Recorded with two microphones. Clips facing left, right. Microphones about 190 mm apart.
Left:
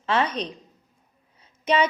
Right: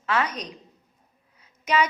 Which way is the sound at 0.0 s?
30° left (ahead or behind).